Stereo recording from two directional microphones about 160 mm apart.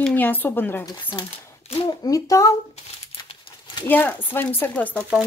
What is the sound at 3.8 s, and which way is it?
A woman's voice, 15° left (ahead or behind).